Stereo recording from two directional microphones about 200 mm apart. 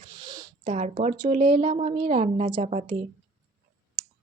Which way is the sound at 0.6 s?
35° right (ahead or behind).